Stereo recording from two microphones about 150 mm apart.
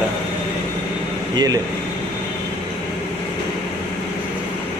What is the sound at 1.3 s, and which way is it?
Speech, 25° right (ahead or behind).